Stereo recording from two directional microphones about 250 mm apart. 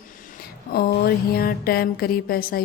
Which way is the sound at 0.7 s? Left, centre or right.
Left.